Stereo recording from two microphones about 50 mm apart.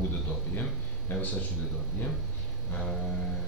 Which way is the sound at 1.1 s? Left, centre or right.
Left.